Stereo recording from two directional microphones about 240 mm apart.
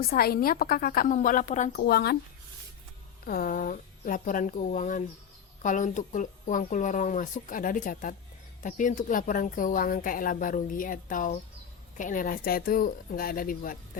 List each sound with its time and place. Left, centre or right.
0.1 s a woman's voice: left
3.2 s a woman's voice: left